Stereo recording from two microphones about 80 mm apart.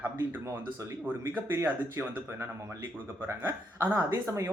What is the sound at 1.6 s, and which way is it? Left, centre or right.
Speech, right.